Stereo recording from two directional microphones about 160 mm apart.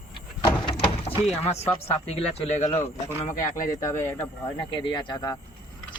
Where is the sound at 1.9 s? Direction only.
40° left (ahead or behind); by 3.8 s 55° left (ahead or behind).